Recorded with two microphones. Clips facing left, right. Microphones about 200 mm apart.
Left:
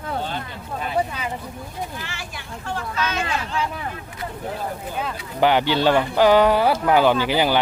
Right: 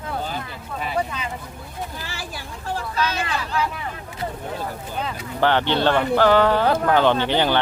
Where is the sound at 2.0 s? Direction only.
35° right (ahead or behind).